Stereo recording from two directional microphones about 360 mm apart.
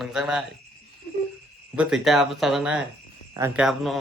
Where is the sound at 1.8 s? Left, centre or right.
Centre.